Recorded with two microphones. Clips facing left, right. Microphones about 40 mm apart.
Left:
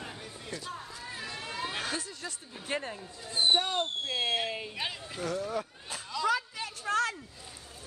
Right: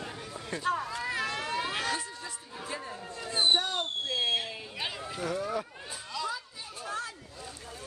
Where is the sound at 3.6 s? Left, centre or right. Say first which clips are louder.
Left 1 dB; left.